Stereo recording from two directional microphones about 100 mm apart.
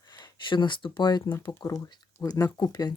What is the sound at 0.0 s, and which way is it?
Speech, 40° left (ahead or behind).